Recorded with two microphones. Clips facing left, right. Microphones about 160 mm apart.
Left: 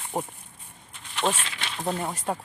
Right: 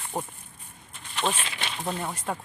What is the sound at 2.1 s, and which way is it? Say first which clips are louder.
Speech: left 2 dB; 15° left (ahead or behind).